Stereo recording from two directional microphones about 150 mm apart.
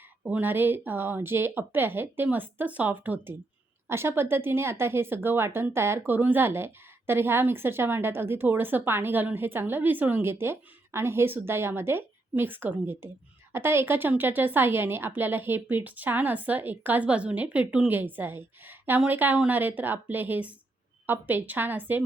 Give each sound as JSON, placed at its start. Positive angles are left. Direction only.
{"t": 0.3, "sound": "a woman's voice", "side_deg": -10}